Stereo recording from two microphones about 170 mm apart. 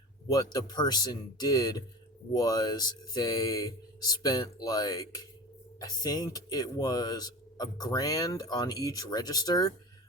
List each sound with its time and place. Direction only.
0.5 s speech: 25° left (ahead or behind)